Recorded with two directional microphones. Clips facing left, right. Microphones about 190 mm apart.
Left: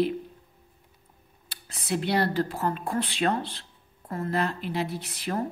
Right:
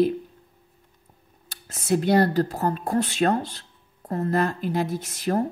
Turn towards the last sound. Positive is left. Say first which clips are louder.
# right 6 dB
turn(degrees=-45)  # may be behind; listen again after turning